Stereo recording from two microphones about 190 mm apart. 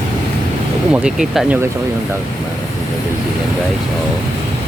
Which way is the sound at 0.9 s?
5° right (ahead or behind).